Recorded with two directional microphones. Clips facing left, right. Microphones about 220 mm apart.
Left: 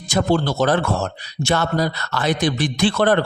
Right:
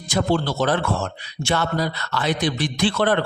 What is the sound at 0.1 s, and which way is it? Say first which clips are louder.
Speech: left 2 dB; 45° left (ahead or behind).